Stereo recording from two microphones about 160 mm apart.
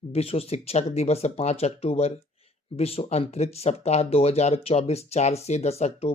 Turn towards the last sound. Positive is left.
turn(degrees=40)  # may be behind; listen again after turning